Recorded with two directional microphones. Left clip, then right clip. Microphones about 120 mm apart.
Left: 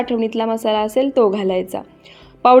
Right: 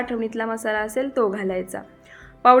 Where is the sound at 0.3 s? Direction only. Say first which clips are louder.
Left 6 dB; 15° left (ahead or behind).